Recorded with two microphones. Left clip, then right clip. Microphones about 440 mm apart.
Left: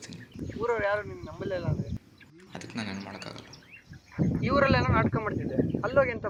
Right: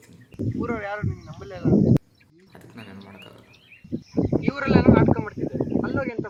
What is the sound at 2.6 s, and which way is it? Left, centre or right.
Speech, right.